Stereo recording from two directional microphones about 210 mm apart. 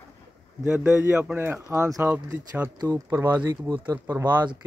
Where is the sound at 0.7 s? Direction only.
5° right (ahead or behind).